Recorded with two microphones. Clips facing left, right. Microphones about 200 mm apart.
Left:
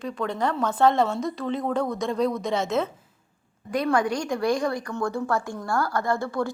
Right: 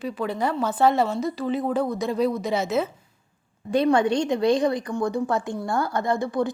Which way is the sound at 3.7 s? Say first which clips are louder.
Right 4 dB; 25° right (ahead or behind).